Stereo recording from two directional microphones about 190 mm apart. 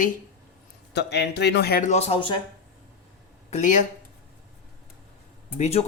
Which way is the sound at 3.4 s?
40° left (ahead or behind).